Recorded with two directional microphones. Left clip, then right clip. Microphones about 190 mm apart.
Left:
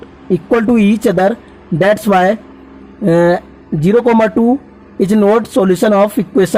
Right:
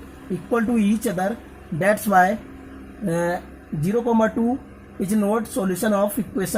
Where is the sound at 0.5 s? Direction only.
45° left (ahead or behind).